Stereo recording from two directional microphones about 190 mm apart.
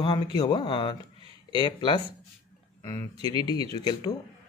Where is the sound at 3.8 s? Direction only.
20° left (ahead or behind).